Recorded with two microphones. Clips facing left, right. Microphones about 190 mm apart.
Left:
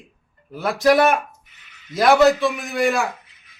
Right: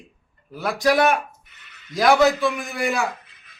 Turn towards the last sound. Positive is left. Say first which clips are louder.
# left 4 dB
turn(degrees=0)  # may be behind; listen again after turning